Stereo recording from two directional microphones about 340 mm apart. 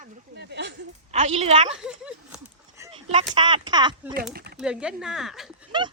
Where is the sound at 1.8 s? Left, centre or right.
Centre.